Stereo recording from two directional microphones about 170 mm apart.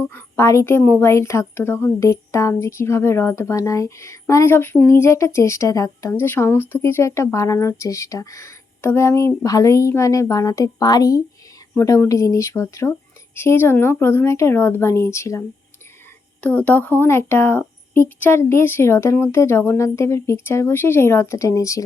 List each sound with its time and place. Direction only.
0.0 s a woman's voice: 10° left (ahead or behind)